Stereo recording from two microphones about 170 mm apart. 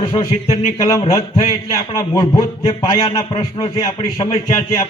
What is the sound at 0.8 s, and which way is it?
A man's voice, 20° left (ahead or behind).